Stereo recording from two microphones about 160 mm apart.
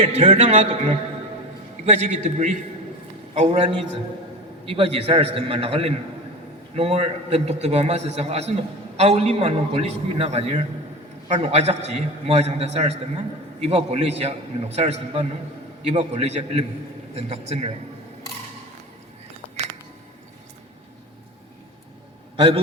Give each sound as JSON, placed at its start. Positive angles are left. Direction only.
{"t": 0.0, "sound": "a man's voice", "side_deg": -35}
{"t": 4.6, "sound": "a man's voice", "side_deg": -35}
{"t": 22.4, "sound": "a man's voice", "side_deg": -35}